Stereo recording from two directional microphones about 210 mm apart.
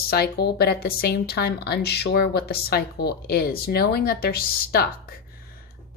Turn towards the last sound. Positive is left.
turn(degrees=45)  # may be behind; listen again after turning